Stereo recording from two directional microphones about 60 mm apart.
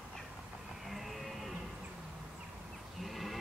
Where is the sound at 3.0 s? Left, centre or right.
Centre.